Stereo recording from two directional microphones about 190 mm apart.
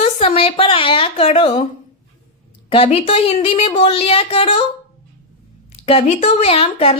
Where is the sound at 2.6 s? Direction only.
30° left (ahead or behind).